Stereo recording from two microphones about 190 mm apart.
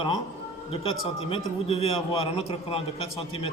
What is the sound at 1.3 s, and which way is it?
A man's voice, 30° left (ahead or behind).